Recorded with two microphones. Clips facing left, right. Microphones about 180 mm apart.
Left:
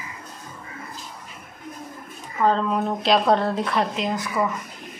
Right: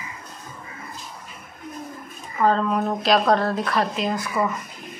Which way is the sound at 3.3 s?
25° left (ahead or behind).